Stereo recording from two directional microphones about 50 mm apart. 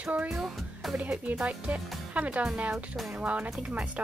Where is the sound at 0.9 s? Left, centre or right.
Right.